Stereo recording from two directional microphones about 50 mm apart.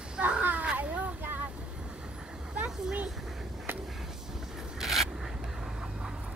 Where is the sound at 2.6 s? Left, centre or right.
Right.